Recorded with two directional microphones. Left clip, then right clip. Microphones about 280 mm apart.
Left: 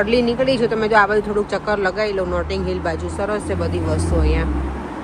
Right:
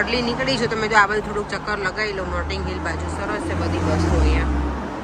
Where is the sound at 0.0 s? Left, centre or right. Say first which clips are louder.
Left 4 dB; centre.